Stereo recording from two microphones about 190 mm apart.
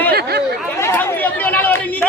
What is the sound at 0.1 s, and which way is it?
Chatter, 55° right (ahead or behind).